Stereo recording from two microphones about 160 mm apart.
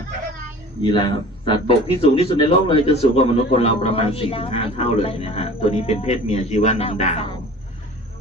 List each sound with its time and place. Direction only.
0.8 s speech: 30° left (ahead or behind)